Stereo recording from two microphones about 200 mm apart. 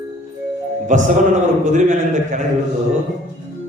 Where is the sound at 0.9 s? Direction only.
40° right (ahead or behind).